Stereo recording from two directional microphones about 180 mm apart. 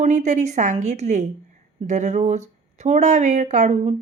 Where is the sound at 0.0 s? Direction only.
40° right (ahead or behind).